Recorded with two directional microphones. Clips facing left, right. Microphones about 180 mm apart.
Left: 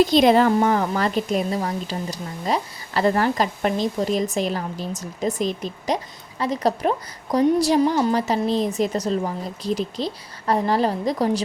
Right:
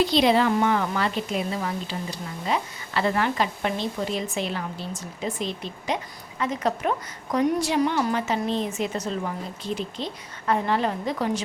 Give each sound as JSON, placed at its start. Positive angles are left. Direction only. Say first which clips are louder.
{"t": 0.0, "sound": "a woman's voice", "louder": "left 5 dB", "side_deg": 45}